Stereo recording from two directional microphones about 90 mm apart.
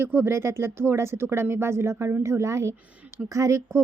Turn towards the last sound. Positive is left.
turn(degrees=-35)  # may be behind; listen again after turning